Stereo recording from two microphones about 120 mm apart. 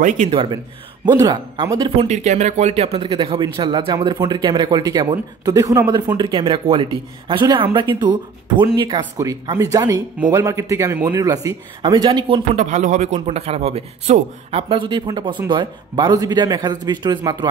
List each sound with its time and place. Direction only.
0.3 s speech: 45° right (ahead or behind)
2.0 s speech: 70° right (ahead or behind); by 9.0 s 40° right (ahead or behind)
9.1 s speech: 25° right (ahead or behind)
12.5 s a man's voice: 75° right (ahead or behind); by 17.5 s 35° right (ahead or behind)